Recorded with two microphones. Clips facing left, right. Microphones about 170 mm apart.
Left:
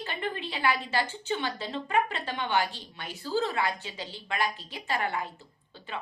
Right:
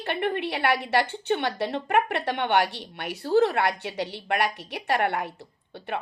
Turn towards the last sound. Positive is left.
turn(degrees=-65)  # may be behind; listen again after turning